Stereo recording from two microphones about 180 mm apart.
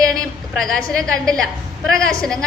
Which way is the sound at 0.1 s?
Centre (ahead or behind).